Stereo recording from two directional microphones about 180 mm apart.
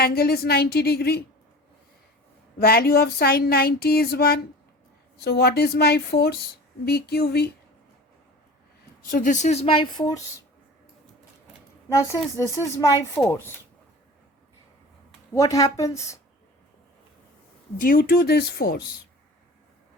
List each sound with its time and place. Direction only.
0.0 s speech: 60° left (ahead or behind)
2.6 s speech: 60° left (ahead or behind)
9.0 s speech: 45° left (ahead or behind); by 10.2 s 25° left (ahead or behind)
11.9 s speech: 15° left (ahead or behind)
15.3 s speech: 20° left (ahead or behind)
17.7 s speech: 50° left (ahead or behind)